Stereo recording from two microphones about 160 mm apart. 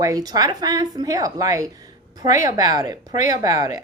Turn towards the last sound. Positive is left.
turn(degrees=-25)  # may be behind; listen again after turning